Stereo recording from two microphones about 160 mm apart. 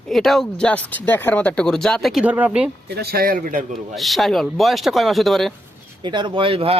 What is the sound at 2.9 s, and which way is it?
Speech, 80° right.